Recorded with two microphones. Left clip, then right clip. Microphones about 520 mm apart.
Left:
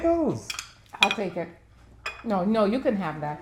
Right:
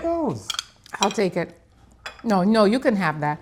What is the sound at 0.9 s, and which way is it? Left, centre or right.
Dishes, right.